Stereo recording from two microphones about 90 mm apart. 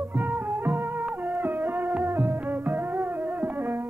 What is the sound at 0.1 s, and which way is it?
Music, 15° right (ahead or behind).